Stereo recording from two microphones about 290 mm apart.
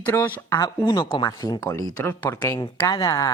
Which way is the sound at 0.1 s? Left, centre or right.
Centre.